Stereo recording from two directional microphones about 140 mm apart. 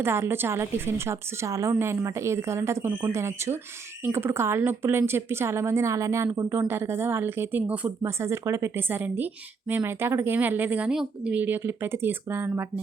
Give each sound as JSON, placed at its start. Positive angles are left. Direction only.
{"t": 0.0, "sound": "a woman's voice", "side_deg": -15}